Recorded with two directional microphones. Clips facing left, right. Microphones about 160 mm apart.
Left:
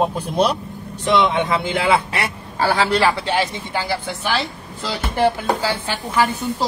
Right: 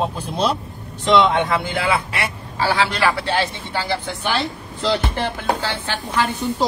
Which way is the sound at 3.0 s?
15° left (ahead or behind).